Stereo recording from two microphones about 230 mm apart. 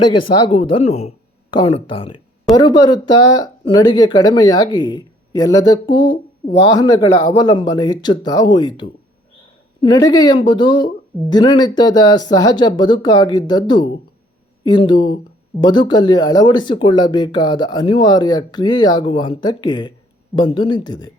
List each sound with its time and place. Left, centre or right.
0.4 s a woman's voice: left